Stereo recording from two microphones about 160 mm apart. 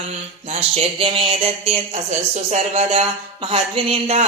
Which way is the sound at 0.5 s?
40° right (ahead or behind).